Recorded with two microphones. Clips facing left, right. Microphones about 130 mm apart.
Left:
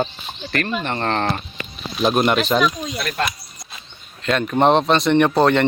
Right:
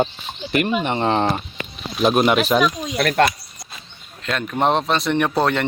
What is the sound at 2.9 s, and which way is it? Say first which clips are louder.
Speech: right 7 dB; 70° right (ahead or behind).